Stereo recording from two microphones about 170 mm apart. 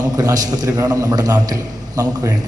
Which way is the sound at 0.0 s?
20° right (ahead or behind).